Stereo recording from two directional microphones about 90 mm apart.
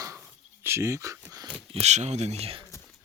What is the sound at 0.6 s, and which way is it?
Speech, 30° right (ahead or behind).